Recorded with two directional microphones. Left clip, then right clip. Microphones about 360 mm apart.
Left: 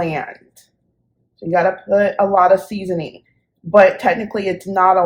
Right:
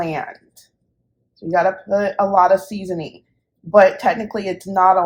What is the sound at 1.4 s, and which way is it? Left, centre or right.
Speech, right.